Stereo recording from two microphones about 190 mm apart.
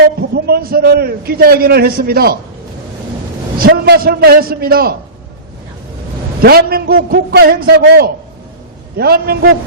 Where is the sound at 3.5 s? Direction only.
50° right (ahead or behind).